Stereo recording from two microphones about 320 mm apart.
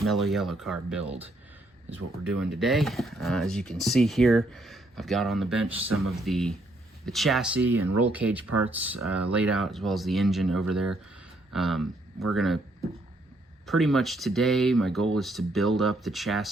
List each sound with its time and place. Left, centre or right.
0.0 s speech: centre
2.2 s speech: centre
13.7 s speech: centre